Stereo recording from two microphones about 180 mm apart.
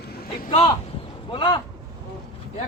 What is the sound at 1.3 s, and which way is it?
Speech, 25° left (ahead or behind).